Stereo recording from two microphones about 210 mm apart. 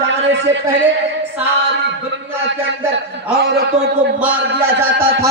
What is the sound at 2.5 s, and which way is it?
Speech, 60° right (ahead or behind).